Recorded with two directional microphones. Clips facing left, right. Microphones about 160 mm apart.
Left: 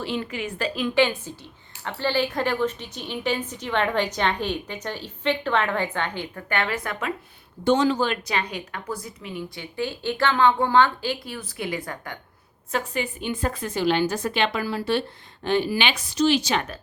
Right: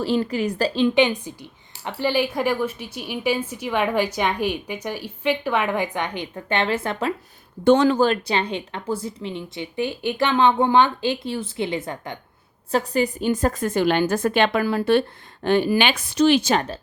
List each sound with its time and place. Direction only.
0.0 s a woman's voice: 35° right (ahead or behind)
7.6 s speech: 55° right (ahead or behind)
8.0 s speech: 35° right (ahead or behind)
12.7 s a woman's voice: 35° right (ahead or behind); by 16.6 s 55° right (ahead or behind)
16.6 s a woman's voice: 30° right (ahead or behind)